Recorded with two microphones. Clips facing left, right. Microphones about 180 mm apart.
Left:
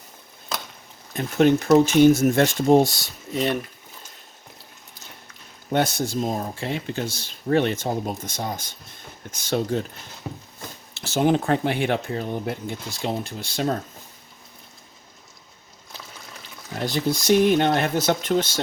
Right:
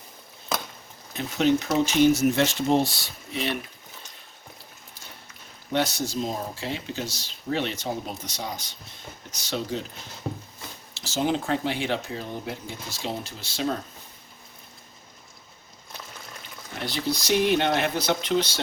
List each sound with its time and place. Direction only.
1.1 s speech: 50° left (ahead or behind)
5.7 s speech: 55° left (ahead or behind)
10.6 s speech: 60° left (ahead or behind)
16.8 s speech: 50° left (ahead or behind)